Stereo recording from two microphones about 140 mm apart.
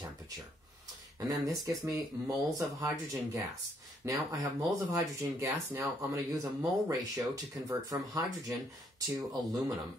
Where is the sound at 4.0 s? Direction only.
25° right (ahead or behind).